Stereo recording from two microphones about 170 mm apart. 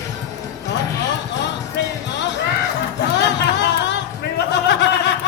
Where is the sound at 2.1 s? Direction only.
90° left.